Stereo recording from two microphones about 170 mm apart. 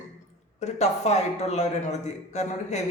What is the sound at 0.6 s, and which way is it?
A man's voice, 40° left (ahead or behind).